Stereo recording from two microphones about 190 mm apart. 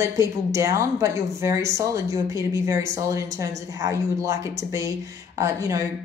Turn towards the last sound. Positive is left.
turn(degrees=-15)  # may be behind; listen again after turning